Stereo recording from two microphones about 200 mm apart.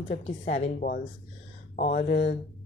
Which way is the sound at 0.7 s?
50° left (ahead or behind).